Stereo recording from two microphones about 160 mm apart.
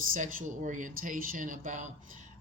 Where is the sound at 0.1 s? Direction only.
55° right (ahead or behind).